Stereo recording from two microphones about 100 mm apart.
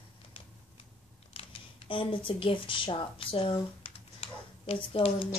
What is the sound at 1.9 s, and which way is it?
Speech, 55° left (ahead or behind).